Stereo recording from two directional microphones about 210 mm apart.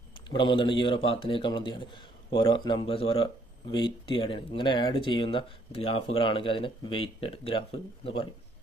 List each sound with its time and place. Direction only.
0.3 s speech: 20° left (ahead or behind)